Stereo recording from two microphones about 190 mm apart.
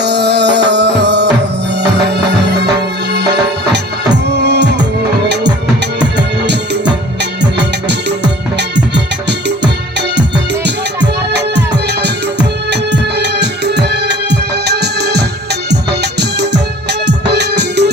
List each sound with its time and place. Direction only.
0.0 s music: 60° right (ahead or behind)
11.0 s music: 65° right (ahead or behind)
17.1 s music: 60° right (ahead or behind)